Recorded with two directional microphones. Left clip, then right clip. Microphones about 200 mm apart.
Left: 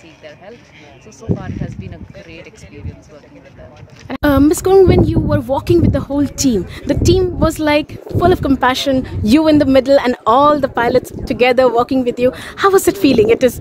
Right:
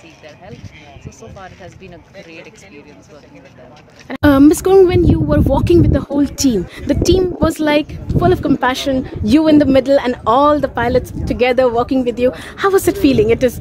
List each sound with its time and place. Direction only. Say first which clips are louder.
4.2 s speech: right 2 dB; centre (ahead or behind); by 9.5 s 30° left (ahead or behind)
9.5 s speech: left 1 dB; 15° left (ahead or behind)